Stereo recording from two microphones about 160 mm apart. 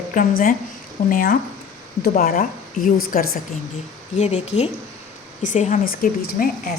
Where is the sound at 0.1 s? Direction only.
60° left (ahead or behind).